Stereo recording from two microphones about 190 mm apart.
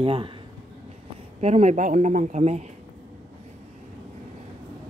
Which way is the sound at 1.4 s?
35° right (ahead or behind).